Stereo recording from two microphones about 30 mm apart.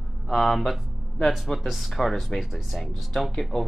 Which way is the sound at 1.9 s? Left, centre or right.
Centre.